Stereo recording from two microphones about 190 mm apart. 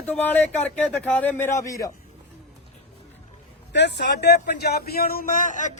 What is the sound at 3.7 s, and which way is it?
Speech, 65° left (ahead or behind).